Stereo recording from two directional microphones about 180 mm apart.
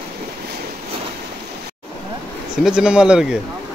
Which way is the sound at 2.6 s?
5° right (ahead or behind).